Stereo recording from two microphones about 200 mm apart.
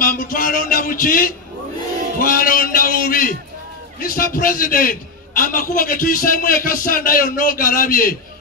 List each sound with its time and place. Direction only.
0.0 s a man's voice: 45° left (ahead or behind)